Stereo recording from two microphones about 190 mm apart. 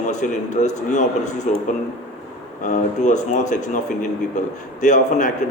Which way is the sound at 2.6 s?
40° left (ahead or behind).